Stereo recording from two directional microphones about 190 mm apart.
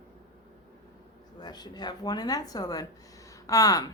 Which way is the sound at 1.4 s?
20° left (ahead or behind).